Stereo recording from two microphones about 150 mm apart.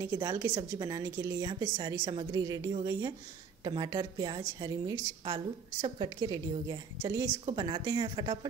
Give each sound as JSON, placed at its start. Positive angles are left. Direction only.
{"t": 0.0, "sound": "a woman's voice", "side_deg": -20}